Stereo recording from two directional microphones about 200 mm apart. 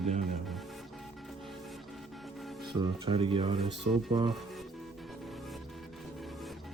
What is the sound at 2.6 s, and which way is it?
Speech, 25° right (ahead or behind).